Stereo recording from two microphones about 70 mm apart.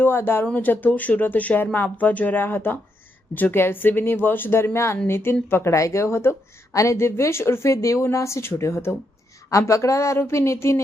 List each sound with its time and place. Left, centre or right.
0.0 s a woman's voice: left